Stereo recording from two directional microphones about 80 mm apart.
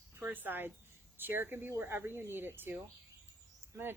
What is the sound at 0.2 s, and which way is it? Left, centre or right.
A woman's voice, right.